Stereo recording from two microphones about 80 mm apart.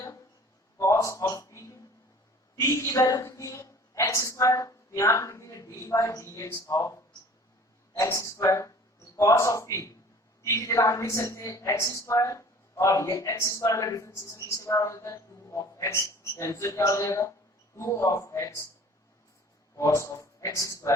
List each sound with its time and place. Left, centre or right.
0.8 s a sound: left
2.6 s a woman's voice: left
19.7 s a woman's voice: left